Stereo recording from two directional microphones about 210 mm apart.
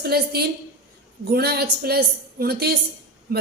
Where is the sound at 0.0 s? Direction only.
50° right (ahead or behind).